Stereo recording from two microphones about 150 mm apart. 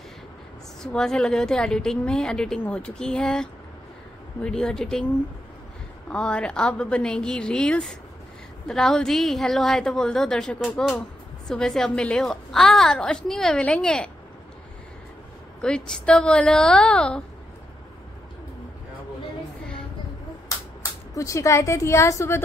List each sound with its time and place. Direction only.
0.8 s a woman's voice: 5° left (ahead or behind)
6.0 s a woman's voice: 5° left (ahead or behind)
15.6 s a woman's voice: 5° left (ahead or behind)
21.1 s a woman's voice: 20° left (ahead or behind)